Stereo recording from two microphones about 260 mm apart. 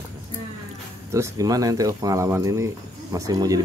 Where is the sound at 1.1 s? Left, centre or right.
Centre.